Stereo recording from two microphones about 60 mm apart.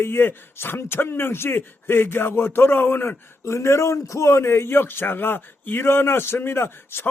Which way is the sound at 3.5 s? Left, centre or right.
Left.